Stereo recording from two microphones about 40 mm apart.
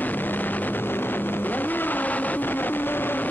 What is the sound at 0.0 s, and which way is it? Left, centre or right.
Vehicle, left.